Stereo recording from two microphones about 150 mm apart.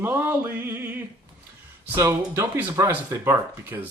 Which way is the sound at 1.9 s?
20° right (ahead or behind).